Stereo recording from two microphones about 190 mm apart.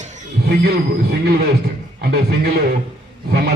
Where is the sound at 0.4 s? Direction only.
55° right (ahead or behind).